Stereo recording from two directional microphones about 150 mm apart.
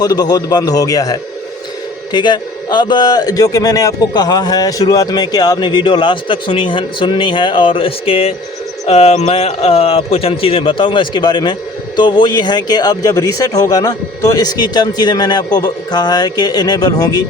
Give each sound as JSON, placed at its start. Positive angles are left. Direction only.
{"t": 0.0, "sound": "a man's voice", "side_deg": 25}